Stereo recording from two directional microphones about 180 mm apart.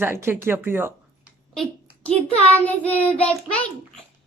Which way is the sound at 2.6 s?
10° left (ahead or behind).